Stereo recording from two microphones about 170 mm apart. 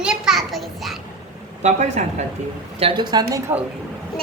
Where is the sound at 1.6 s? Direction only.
40° right (ahead or behind).